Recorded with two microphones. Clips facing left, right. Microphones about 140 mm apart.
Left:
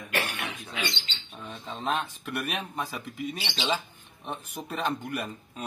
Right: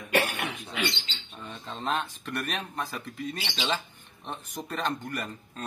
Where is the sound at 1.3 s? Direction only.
5° left (ahead or behind).